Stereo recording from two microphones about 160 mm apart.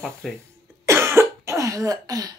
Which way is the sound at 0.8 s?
15° right (ahead or behind).